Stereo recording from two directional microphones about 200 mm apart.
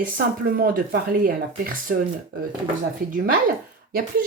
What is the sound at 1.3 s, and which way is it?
Speech, 45° right (ahead or behind).